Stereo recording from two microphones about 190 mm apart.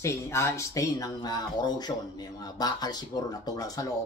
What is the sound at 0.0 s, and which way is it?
Speech, 15° left (ahead or behind).